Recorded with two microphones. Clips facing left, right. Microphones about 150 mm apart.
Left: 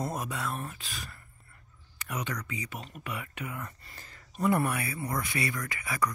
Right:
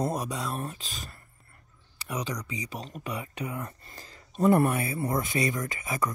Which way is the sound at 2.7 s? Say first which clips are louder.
Right 3 dB; 35° right (ahead or behind).